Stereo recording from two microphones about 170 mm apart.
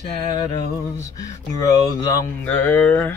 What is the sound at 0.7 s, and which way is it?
Music, 20° left (ahead or behind).